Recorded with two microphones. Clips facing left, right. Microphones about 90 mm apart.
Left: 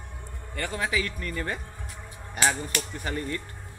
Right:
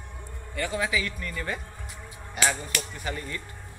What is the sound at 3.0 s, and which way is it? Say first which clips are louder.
Speech: left 3 dB; 40° left (ahead or behind).